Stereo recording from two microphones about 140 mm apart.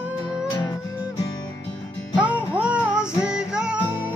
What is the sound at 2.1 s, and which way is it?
Music, 10° right (ahead or behind).